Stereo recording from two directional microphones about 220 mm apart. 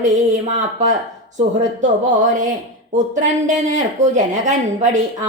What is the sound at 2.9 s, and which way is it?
Speech, 35° right (ahead or behind).